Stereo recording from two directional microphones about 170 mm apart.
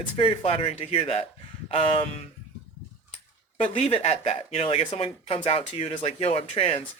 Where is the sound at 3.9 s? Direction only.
35° left (ahead or behind).